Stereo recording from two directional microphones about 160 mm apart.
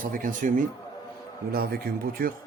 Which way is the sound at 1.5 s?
75° right (ahead or behind).